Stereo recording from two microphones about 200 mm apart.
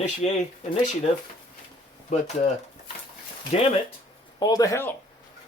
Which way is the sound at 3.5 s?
30° left (ahead or behind).